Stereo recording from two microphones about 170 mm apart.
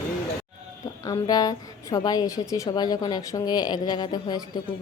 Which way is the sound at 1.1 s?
20° left (ahead or behind).